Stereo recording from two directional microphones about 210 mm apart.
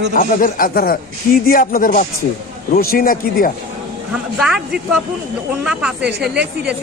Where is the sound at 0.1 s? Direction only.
40° left (ahead or behind).